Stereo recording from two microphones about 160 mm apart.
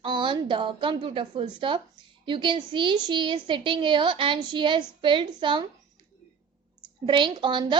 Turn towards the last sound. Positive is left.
turn(degrees=-30)  # may be behind; listen again after turning